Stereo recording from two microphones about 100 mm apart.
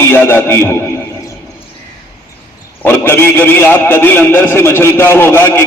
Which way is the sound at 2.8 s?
25° left (ahead or behind).